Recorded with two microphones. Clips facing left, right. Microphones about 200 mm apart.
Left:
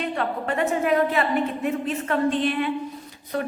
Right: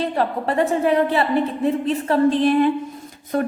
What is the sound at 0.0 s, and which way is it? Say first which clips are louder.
A woman's voice: right 5 dB; 35° right (ahead or behind).